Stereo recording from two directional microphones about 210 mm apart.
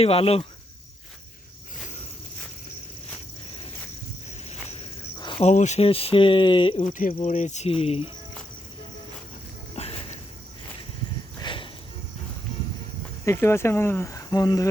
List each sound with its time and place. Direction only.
0.0 s speech: 25° left (ahead or behind)
5.2 s speech: 25° left (ahead or behind)
6.8 s speech: 40° left (ahead or behind)
9.7 s insect: 30° left (ahead or behind)
11.3 s cricket: 25° left (ahead or behind)
13.2 s speech: 10° left (ahead or behind)